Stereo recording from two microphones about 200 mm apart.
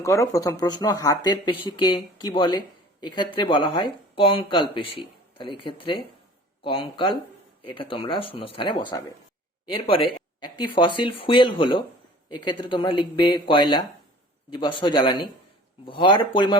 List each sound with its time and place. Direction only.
0.0 s speech: 15° left (ahead or behind)
9.9 s a sound: 25° left (ahead or behind)
10.8 s speech: 25° left (ahead or behind)